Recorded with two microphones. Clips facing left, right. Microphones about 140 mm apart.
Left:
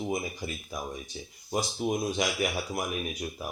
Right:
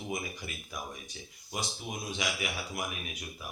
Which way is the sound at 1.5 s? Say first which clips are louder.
Left 9 dB; 45° left (ahead or behind).